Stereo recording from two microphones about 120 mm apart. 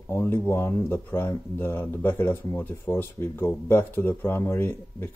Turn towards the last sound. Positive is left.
turn(degrees=15)  # may be behind; listen again after turning